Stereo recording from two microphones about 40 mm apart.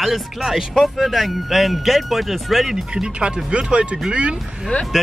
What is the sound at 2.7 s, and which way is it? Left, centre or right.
Speech, right.